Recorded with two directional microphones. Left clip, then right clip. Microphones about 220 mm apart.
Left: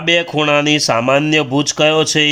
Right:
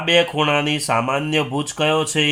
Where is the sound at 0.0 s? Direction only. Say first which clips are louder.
Left 2 dB; 45° left (ahead or behind).